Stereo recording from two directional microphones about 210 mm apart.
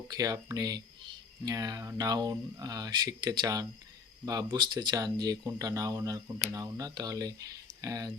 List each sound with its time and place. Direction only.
0.1 s speech: 15° right (ahead or behind)